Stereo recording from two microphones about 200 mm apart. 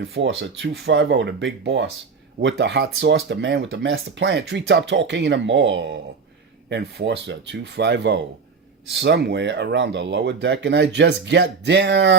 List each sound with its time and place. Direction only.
0.0 s speech: 60° right (ahead or behind)